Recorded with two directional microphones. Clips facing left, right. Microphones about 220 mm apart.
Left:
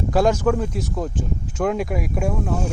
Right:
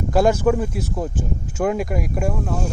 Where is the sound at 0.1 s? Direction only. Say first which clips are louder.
Right 2 dB; 5° right (ahead or behind).